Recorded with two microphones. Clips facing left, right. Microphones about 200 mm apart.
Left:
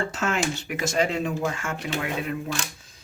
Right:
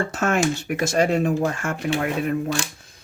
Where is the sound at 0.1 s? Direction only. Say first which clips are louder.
Right 5 dB; 50° right (ahead or behind).